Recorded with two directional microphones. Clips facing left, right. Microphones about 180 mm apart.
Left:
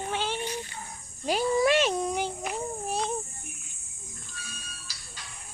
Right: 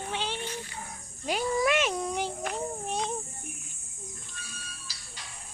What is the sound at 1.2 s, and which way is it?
Insect, 35° left (ahead or behind).